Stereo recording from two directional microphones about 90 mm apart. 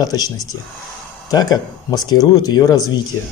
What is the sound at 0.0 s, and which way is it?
Speech, 45° left (ahead or behind).